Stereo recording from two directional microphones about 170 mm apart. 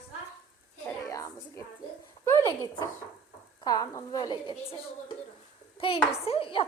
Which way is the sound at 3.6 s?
20° left (ahead or behind).